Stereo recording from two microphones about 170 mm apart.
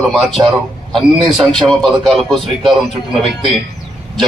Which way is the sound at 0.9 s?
Centre (ahead or behind).